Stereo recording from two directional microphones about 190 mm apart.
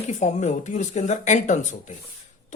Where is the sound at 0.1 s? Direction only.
40° left (ahead or behind).